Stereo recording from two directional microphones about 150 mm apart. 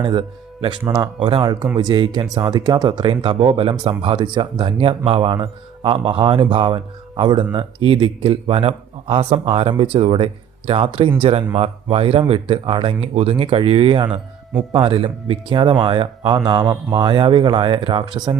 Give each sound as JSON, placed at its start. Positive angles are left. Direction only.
{"t": 0.0, "sound": "speech", "side_deg": -30}